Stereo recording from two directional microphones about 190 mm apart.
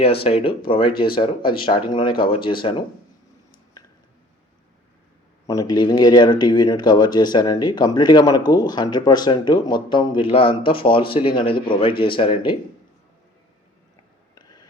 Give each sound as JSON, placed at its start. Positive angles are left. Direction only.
{"t": 0.0, "sound": "speech", "side_deg": 30}
{"t": 5.5, "sound": "speech", "side_deg": 20}